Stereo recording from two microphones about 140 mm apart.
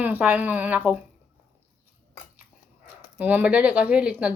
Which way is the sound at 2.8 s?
15° right (ahead or behind).